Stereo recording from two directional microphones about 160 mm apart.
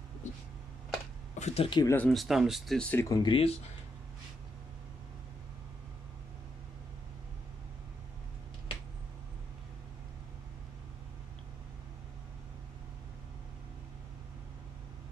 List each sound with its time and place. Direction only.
0.2 s a sound: 50° left (ahead or behind)
1.3 s speech: 40° left (ahead or behind)
1.8 s speech: 15° left (ahead or behind)
2.0 s speech: centre (ahead or behind)
3.1 s speech: 30° left (ahead or behind)